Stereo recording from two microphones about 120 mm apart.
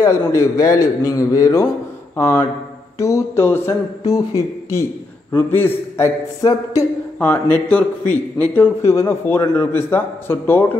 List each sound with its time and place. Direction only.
0.0 s a man's voice: 25° left (ahead or behind)
5.3 s a man's voice: 20° left (ahead or behind)
7.2 s a man's voice: 15° left (ahead or behind)